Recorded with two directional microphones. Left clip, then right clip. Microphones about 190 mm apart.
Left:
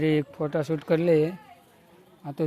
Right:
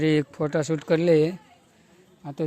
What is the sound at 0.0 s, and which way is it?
Speech, 15° right (ahead or behind).